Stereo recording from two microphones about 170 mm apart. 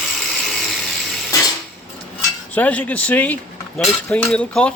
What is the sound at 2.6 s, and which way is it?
Speech, 10° left (ahead or behind).